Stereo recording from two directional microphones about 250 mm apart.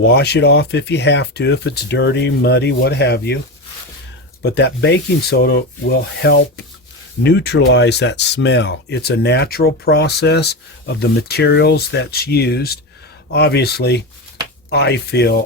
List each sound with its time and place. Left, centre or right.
0.0 s speech: left
4.5 s speech: left